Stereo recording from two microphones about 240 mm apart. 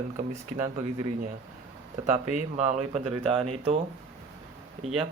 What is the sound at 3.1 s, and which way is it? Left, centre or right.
Speech, centre.